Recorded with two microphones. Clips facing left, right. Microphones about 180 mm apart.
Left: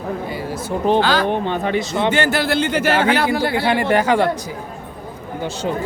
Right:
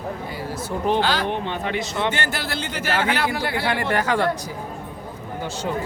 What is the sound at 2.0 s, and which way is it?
Speech, 90° left.